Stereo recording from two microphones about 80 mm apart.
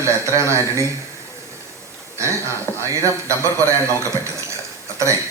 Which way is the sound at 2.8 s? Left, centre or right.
Right.